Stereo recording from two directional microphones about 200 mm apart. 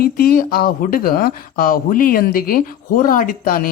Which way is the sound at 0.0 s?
50° left (ahead or behind).